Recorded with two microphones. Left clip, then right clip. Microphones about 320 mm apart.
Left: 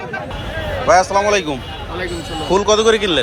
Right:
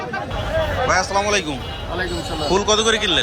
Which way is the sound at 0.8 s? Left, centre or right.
Centre.